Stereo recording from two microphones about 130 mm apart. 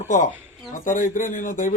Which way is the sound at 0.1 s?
85° left.